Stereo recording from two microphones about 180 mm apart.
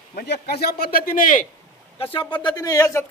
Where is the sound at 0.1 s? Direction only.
60° left (ahead or behind).